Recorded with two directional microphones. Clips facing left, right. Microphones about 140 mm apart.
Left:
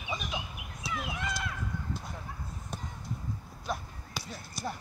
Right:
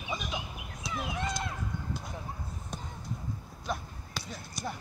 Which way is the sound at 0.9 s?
30° right (ahead or behind).